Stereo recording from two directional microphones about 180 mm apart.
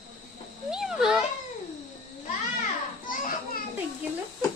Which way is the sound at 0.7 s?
5° right (ahead or behind).